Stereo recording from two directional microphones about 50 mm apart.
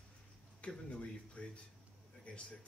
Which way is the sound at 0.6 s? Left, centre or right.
Centre.